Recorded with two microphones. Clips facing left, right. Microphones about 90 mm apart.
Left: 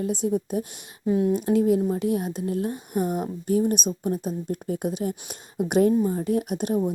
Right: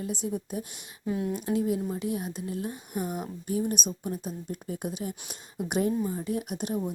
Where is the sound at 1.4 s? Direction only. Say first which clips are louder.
Left 7 dB; 50° left (ahead or behind).